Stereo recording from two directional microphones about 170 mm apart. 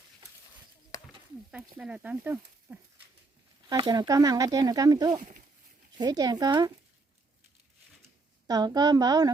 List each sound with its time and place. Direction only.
1.5 s speech: 5° right (ahead or behind)
3.7 s speech: 25° right (ahead or behind)
8.4 s speech: 20° right (ahead or behind)